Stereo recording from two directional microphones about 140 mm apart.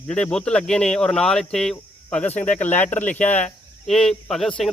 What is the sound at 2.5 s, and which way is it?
Speech, 15° left (ahead or behind).